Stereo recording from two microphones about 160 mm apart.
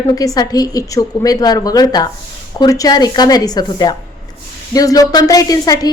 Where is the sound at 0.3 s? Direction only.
25° left (ahead or behind).